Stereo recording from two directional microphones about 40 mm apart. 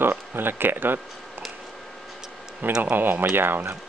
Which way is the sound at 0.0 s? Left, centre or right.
Right.